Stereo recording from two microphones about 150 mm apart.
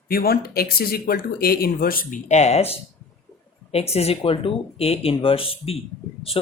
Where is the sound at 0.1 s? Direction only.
90° left.